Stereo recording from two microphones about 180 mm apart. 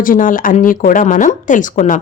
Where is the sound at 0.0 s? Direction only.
50° left (ahead or behind).